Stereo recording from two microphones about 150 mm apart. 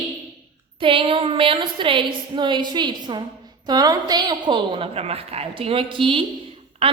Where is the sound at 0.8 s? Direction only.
35° right (ahead or behind).